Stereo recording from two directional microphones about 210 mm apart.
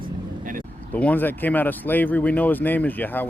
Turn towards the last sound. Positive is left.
turn(degrees=10)  # may be behind; listen again after turning